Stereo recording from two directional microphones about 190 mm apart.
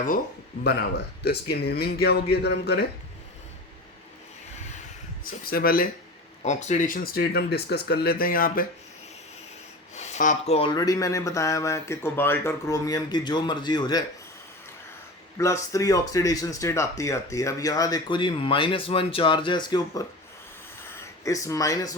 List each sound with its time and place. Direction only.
0.6 s speech: 60° left (ahead or behind)
5.2 s speech: 50° left (ahead or behind)
6.4 s speech: 40° left (ahead or behind)
9.9 s speech: 35° left (ahead or behind); by 14.0 s 20° left (ahead or behind)
15.4 s speech: 15° left (ahead or behind)
21.2 s speech: 15° left (ahead or behind)